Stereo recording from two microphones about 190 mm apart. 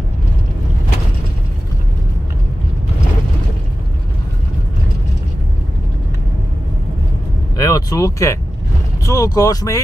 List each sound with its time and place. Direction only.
7.5 s vehicle: 20° left (ahead or behind)
9.0 s speech: 20° left (ahead or behind)